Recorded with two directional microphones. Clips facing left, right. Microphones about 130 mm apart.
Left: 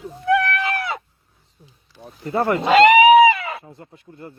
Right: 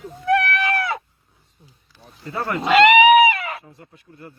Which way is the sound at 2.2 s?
25° left (ahead or behind).